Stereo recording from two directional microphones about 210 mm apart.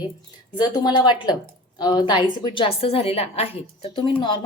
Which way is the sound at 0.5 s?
20° left (ahead or behind).